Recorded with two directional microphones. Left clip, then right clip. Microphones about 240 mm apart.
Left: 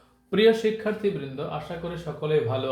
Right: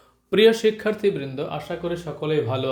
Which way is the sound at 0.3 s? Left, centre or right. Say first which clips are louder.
Right 3 dB; right.